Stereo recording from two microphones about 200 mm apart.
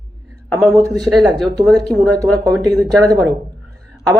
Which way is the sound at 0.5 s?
10° right (ahead or behind).